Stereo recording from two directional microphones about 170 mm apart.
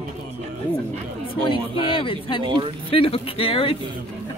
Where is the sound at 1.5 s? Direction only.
30° left (ahead or behind).